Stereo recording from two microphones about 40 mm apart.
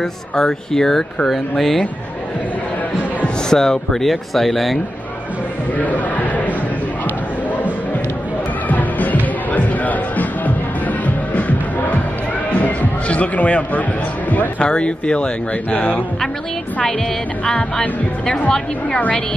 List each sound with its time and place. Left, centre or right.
0.0 s speech: centre
3.4 s speech: centre
5.8 s speech: left
8.6 s music: left
14.6 s speech: left
15.7 s speech: left
17.5 s speech: centre